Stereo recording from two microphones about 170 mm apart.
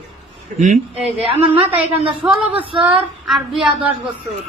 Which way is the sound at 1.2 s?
10° right (ahead or behind).